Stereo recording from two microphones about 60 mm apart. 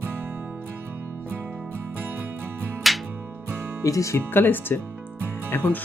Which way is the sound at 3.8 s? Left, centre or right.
Left.